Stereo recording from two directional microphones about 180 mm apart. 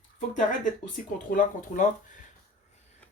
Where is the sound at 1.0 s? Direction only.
50° left (ahead or behind).